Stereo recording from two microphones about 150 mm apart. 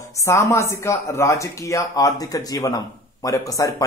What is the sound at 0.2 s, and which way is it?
Speech, 20° left (ahead or behind).